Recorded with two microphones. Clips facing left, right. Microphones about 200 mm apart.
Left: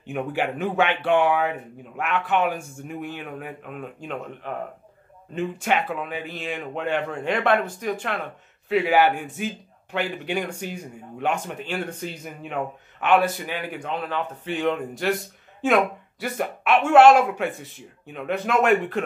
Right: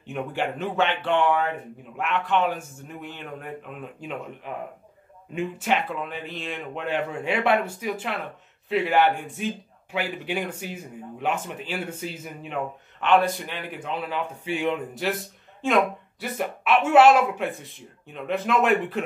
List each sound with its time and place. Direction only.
0.0 s a man's voice: 5° left (ahead or behind)
5.3 s a man's voice: 5° right (ahead or behind)